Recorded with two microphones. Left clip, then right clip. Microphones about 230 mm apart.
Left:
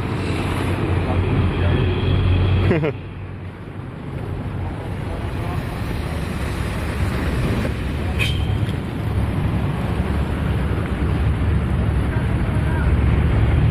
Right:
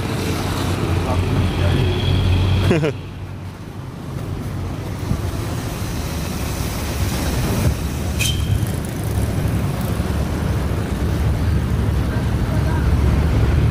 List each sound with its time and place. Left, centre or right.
2.7 s speech: centre